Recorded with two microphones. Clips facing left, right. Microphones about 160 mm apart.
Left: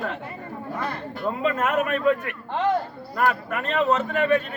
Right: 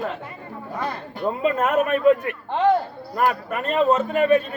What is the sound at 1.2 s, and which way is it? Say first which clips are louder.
Speech: right 3 dB; 30° right (ahead or behind).